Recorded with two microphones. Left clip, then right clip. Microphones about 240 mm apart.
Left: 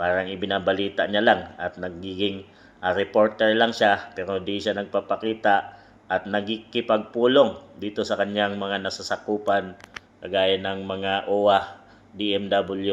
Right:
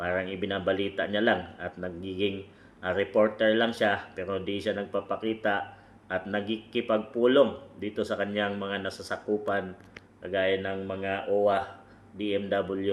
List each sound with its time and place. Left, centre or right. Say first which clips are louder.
0.0 s a sound: left 7 dB; centre
0.4 s a man's voice: left 5 dB; centre
12.2 s a man's voice: left 5 dB; centre